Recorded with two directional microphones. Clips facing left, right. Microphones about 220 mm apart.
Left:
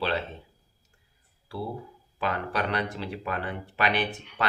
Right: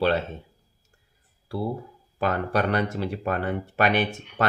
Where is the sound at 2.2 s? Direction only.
45° right (ahead or behind).